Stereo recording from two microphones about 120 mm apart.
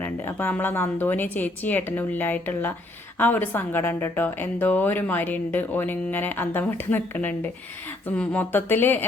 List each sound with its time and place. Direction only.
0.0 s a woman's voice: 15° left (ahead or behind)